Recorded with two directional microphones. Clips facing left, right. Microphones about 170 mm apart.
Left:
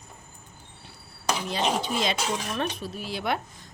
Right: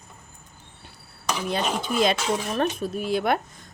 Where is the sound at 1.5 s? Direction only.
50° right (ahead or behind).